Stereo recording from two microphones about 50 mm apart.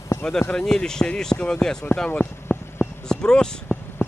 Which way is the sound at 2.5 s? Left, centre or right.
Left.